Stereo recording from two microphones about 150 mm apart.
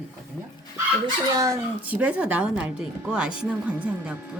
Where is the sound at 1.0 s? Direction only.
25° right (ahead or behind).